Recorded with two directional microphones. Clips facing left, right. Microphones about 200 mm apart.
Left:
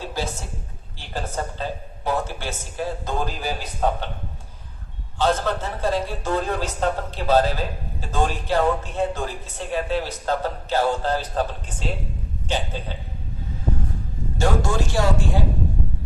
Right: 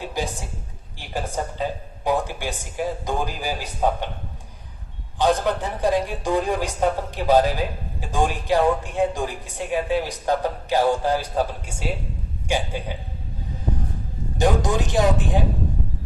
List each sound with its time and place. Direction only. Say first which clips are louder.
0.0 s a woman's voice: right 1 dB; 15° right (ahead or behind)
5.1 s speech: right 2 dB; 15° right (ahead or behind)
14.3 s speech: right 2 dB; 20° right (ahead or behind)